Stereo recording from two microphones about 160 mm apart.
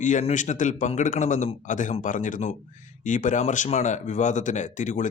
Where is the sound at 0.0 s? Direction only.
50° left (ahead or behind).